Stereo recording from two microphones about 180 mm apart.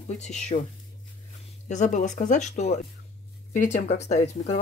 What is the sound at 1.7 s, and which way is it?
Speech, 45° left (ahead or behind).